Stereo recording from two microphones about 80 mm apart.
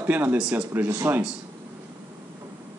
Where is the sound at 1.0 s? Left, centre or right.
Right.